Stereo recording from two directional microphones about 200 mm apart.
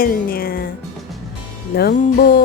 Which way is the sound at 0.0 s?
45° left (ahead or behind).